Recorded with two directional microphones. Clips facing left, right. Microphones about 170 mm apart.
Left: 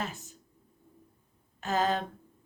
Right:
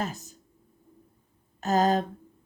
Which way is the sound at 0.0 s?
40° right (ahead or behind).